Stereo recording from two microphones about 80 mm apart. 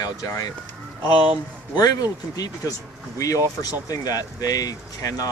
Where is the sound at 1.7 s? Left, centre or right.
Left.